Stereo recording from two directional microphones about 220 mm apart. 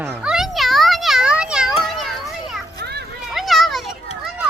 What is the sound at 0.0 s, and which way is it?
Children playing, 5° right (ahead or behind).